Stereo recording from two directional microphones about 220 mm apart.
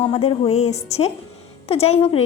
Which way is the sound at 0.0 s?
25° left (ahead or behind).